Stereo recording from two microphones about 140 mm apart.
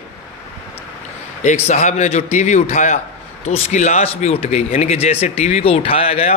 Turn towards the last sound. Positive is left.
turn(degrees=45)  # may be behind; listen again after turning